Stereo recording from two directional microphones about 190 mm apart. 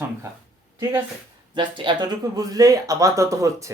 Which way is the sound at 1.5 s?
25° right (ahead or behind).